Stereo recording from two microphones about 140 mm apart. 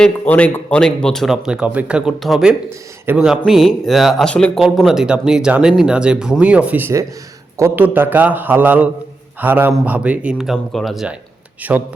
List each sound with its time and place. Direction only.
0.0 s a man's voice: 10° left (ahead or behind); by 11.8 s 10° right (ahead or behind)